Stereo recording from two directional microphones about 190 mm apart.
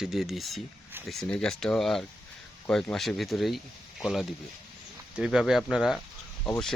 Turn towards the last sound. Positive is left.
turn(degrees=0)  # may be behind; listen again after turning